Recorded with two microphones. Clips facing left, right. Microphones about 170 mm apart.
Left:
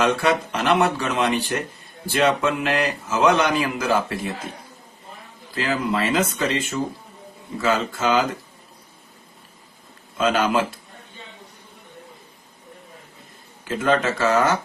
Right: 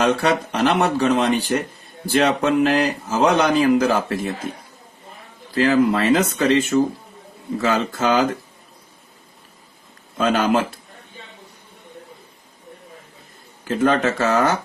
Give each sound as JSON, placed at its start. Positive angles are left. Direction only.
{"t": 0.0, "sound": "speech", "side_deg": -35}
{"t": 5.5, "sound": "speech", "side_deg": -40}
{"t": 10.2, "sound": "speech", "side_deg": -45}
{"t": 13.7, "sound": "speech", "side_deg": -35}